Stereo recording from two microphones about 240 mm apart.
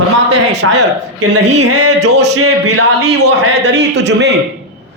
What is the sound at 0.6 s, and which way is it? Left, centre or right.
A man's voice, right.